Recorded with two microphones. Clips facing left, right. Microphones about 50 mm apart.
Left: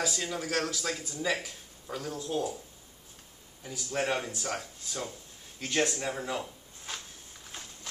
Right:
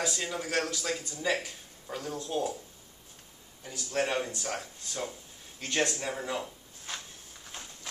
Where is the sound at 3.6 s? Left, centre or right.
Centre.